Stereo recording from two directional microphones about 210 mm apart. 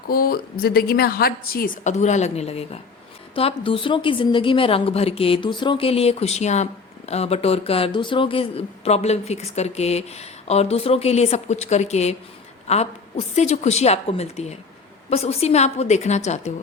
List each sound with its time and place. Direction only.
0.1 s a woman's voice: 45° left (ahead or behind)